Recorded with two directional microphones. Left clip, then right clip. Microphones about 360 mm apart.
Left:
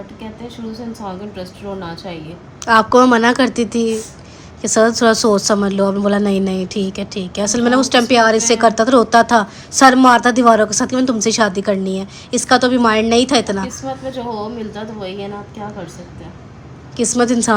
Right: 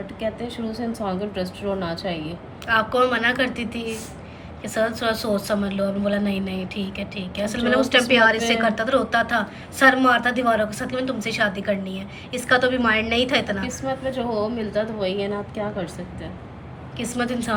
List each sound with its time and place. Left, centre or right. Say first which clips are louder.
0.7 s a woman's voice: even; centre
2.6 s a woman's voice: left 9 dB; centre
17.0 s a woman's voice: left 11 dB; centre